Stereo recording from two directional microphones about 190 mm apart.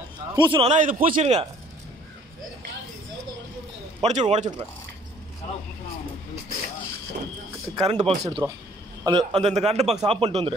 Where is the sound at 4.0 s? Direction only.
35° right (ahead or behind).